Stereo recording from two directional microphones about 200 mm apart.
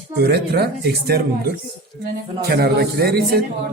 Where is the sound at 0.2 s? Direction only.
55° right (ahead or behind).